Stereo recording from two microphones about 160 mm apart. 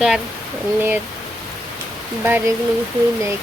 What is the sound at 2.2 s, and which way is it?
Speech, 15° right (ahead or behind).